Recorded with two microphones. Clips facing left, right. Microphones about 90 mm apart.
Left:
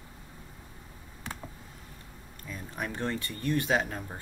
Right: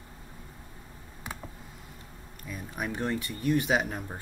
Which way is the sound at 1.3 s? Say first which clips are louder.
Even; 15° right (ahead or behind).